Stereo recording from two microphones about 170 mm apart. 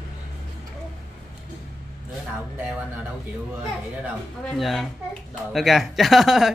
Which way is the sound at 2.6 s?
5° right (ahead or behind).